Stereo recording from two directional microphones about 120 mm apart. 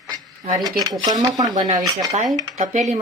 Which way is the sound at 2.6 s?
90° right.